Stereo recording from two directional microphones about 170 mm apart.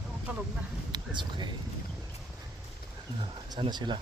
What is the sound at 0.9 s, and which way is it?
Speech, 25° right (ahead or behind).